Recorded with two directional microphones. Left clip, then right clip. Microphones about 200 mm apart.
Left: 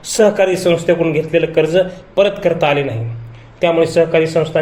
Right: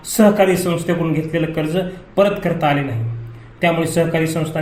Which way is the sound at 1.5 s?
30° left (ahead or behind).